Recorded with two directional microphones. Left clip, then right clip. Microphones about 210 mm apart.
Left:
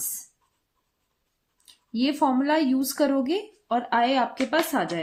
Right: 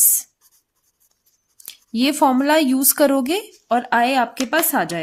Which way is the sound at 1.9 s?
40° right (ahead or behind).